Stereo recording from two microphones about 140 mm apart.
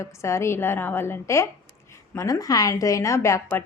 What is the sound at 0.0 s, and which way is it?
A woman's voice, 20° left (ahead or behind).